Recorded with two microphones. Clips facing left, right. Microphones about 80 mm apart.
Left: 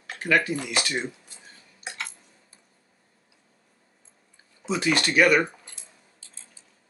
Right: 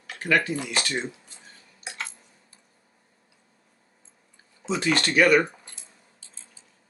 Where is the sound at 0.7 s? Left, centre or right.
Centre.